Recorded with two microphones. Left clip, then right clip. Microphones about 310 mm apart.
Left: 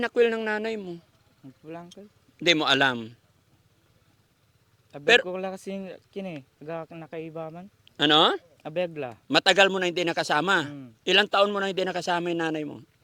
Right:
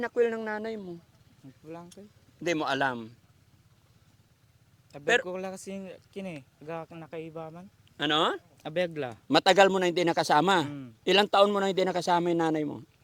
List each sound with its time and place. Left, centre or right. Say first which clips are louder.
0.0 s speech: left 4 dB; left
4.9 s speech: left 6 dB; left
8.5 s a man's voice: left 1 dB; centre